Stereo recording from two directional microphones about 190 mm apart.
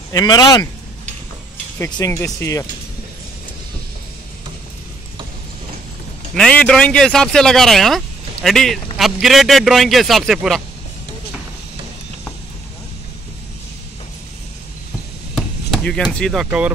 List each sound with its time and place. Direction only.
0.1 s a man's voice: 20° left (ahead or behind)
1.8 s speech: 20° left (ahead or behind)
6.3 s speech: 5° left (ahead or behind)
15.3 s chop: centre (ahead or behind)
16.4 s speech: 5° right (ahead or behind)